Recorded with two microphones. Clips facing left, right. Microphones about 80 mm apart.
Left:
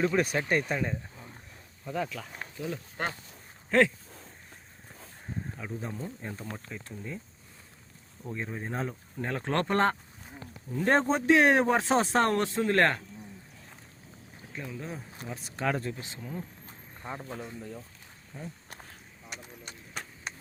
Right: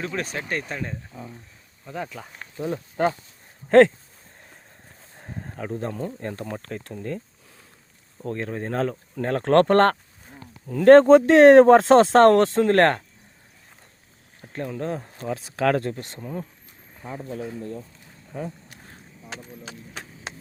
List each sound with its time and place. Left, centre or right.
0.0 s speech: centre
2.0 s speech: centre
2.6 s speech: right
3.7 s speech: right
5.2 s speech: right
8.2 s speech: right
12.6 s speech: right
14.5 s speech: right
15.3 s speech: right
15.9 s speech: right
18.3 s speech: right